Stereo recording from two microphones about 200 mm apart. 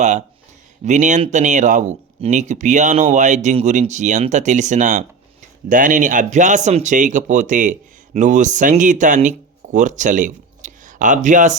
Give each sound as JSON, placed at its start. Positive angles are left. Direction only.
{"t": 0.0, "sound": "speech", "side_deg": -35}